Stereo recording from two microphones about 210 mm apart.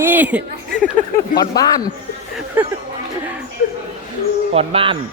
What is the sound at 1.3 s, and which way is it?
Speech, 15° left (ahead or behind).